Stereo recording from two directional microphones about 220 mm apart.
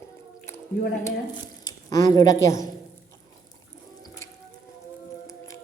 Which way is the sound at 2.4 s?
15° left (ahead or behind).